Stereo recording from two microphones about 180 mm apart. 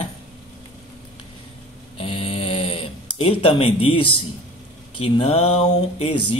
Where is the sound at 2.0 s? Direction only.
30° left (ahead or behind).